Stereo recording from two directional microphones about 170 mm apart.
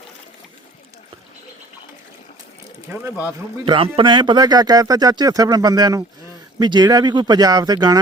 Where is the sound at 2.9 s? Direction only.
10° right (ahead or behind).